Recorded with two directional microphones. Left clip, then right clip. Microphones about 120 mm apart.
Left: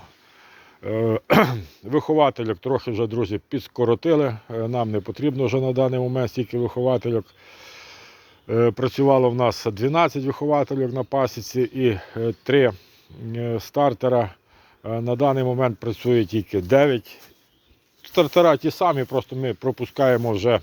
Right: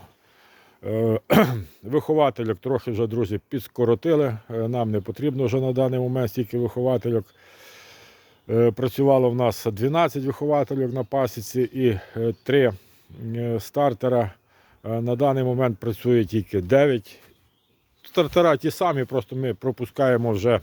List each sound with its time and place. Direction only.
0.8 s speech: 40° right (ahead or behind); by 17.2 s 55° right (ahead or behind)
18.0 s speech: 45° right (ahead or behind)